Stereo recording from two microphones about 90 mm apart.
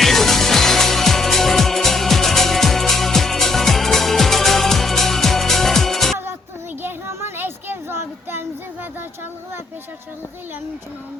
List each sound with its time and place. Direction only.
0.0 s music: 5° left (ahead or behind)
6.8 s child singing: 25° right (ahead or behind)